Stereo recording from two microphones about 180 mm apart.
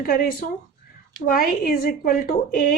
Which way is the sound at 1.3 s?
55° left (ahead or behind).